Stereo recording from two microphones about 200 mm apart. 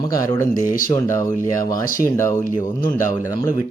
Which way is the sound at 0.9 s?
15° left (ahead or behind).